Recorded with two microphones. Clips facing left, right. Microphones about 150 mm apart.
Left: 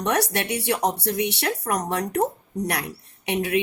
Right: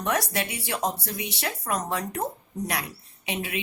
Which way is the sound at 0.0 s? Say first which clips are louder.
Left 3 dB; 65° left (ahead or behind).